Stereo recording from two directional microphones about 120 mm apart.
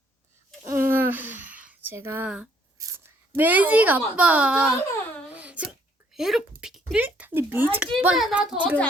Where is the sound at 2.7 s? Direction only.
30° right (ahead or behind).